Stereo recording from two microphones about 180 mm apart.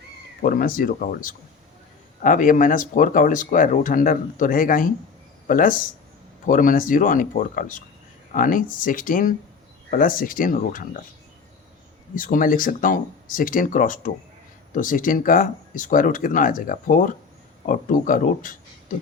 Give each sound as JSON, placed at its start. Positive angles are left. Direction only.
{"t": 0.4, "sound": "speech", "side_deg": 50}
{"t": 12.1, "sound": "speech", "side_deg": 50}